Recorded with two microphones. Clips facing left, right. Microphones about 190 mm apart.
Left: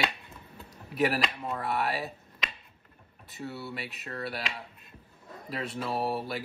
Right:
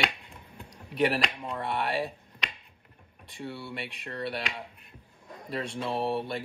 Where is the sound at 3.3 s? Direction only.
5° left (ahead or behind).